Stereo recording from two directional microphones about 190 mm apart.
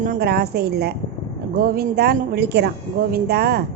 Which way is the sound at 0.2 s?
60° right (ahead or behind).